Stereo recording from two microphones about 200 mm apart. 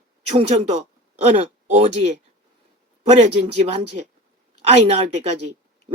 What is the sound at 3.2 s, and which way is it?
Speech, 30° right (ahead or behind).